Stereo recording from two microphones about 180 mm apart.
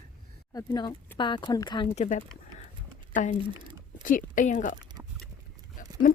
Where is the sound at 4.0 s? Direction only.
50° left (ahead or behind).